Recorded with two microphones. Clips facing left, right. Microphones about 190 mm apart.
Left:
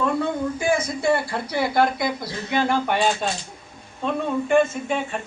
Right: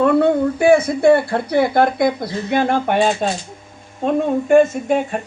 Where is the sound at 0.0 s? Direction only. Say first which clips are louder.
Right 9 dB; 65° right (ahead or behind).